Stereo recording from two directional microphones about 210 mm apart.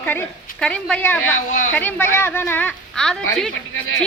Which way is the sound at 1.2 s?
75° left (ahead or behind).